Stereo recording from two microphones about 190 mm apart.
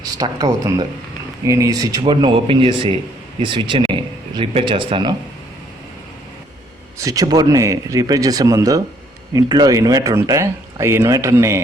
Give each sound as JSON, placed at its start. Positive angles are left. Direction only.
{"t": 0.0, "sound": "speech", "side_deg": -20}
{"t": 7.0, "sound": "speech", "side_deg": -20}